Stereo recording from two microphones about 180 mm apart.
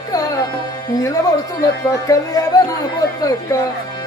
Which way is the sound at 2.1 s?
20° left (ahead or behind).